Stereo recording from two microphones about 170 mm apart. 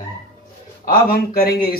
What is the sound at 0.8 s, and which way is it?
Speech, 60° left (ahead or behind).